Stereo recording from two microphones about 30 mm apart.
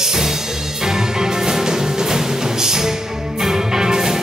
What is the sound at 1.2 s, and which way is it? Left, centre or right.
Music, right.